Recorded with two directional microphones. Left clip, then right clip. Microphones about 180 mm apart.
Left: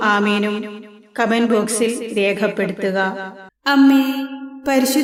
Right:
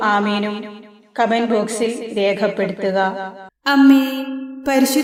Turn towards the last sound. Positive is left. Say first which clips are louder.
# right 1 dB
turn(degrees=0)  # may be behind; listen again after turning